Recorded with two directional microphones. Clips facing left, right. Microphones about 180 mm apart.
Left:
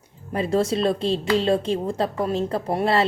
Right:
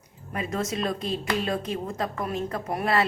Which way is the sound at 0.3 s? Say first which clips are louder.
Left 7 dB; 30° left (ahead or behind).